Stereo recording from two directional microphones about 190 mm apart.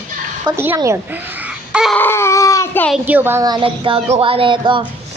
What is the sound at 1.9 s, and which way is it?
Dog, 10° left (ahead or behind).